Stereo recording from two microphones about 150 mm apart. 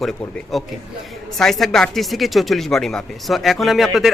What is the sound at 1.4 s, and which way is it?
Speech, centre (ahead or behind).